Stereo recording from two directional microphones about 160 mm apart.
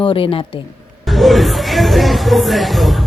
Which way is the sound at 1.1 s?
Centre (ahead or behind).